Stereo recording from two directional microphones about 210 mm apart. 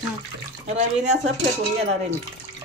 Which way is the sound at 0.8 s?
35° right (ahead or behind).